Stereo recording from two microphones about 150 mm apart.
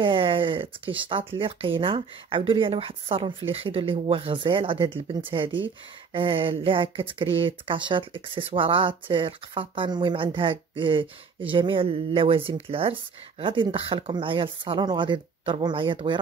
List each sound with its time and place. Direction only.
0.0 s speech: 35° right (ahead or behind)